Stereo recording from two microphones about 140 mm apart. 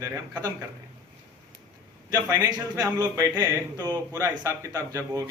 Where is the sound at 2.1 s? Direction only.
25° right (ahead or behind).